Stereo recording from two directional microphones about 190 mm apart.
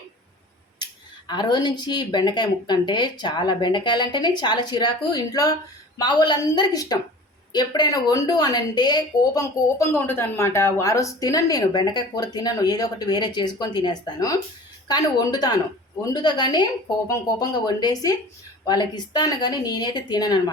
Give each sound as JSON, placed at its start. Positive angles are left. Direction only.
{"t": 1.3, "sound": "speech", "side_deg": 20}